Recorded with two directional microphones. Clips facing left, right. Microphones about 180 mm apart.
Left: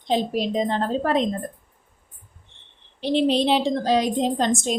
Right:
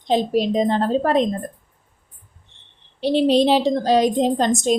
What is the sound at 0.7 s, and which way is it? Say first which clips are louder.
Speech: right 4 dB; 40° right (ahead or behind).